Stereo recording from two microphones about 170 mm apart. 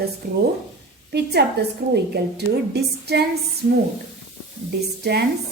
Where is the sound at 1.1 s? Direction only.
75° right (ahead or behind).